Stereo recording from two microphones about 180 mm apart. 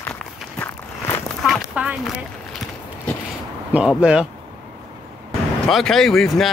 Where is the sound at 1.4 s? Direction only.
5° right (ahead or behind).